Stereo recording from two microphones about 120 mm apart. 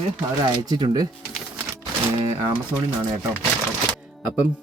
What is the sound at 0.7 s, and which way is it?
Speech, 35° right (ahead or behind).